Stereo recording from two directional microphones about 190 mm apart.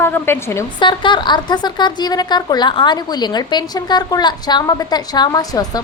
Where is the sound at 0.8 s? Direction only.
25° left (ahead or behind).